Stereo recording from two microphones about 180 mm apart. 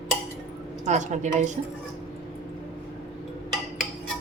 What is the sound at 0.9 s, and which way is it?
Speech, 40° right (ahead or behind).